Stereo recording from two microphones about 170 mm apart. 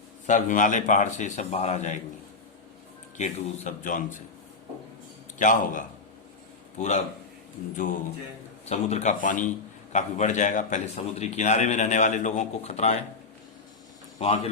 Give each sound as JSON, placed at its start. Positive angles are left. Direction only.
{"t": 0.3, "sound": "a man's voice", "side_deg": 45}
{"t": 3.2, "sound": "a man's voice", "side_deg": 45}
{"t": 5.4, "sound": "a man's voice", "side_deg": 50}
{"t": 8.6, "sound": "a man's voice", "side_deg": 40}
{"t": 14.2, "sound": "speech", "side_deg": 40}